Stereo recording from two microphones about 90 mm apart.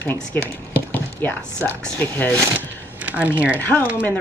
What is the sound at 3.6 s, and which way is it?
Speech, 20° left (ahead or behind).